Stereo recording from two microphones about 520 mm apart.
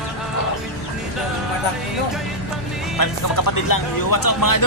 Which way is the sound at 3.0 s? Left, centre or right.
Left.